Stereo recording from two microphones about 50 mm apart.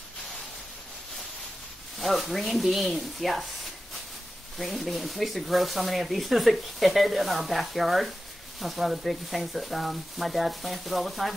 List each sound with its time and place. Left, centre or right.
2.0 s speech: centre
4.6 s speech: centre